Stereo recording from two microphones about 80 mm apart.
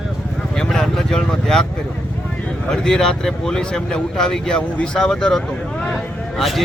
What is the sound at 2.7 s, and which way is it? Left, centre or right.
Speech, centre.